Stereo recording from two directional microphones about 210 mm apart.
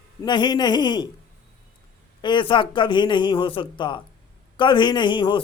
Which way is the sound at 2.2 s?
20° left (ahead or behind).